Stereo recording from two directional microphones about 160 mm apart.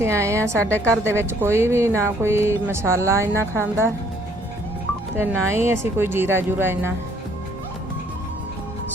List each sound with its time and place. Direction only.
0.0 s speech: 20° right (ahead or behind)
0.6 s a woman's voice: 10° left (ahead or behind)
1.0 s speech: 15° right (ahead or behind)
5.2 s speech: 15° right (ahead or behind)